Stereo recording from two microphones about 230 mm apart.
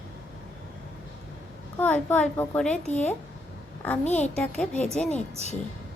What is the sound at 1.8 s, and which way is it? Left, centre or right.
A woman's voice, centre.